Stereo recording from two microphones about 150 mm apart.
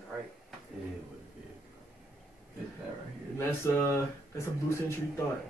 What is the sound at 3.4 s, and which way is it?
Speech, 15° left (ahead or behind).